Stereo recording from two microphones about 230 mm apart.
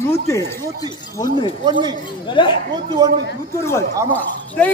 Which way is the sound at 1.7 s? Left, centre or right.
Centre.